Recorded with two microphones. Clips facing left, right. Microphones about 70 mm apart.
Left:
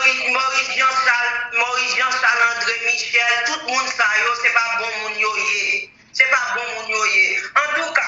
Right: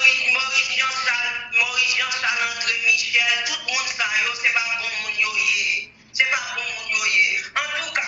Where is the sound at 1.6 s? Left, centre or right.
Left.